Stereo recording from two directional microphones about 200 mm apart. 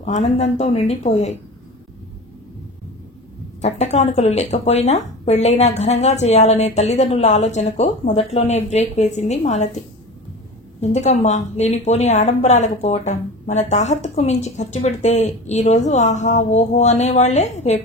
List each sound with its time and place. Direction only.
0.0 s a woman's voice: 35° left (ahead or behind)
3.6 s a woman's voice: 35° left (ahead or behind)
10.8 s a woman's voice: 35° left (ahead or behind)